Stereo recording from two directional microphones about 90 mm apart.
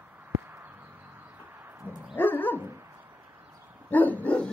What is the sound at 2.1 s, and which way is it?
Dog, 20° left (ahead or behind).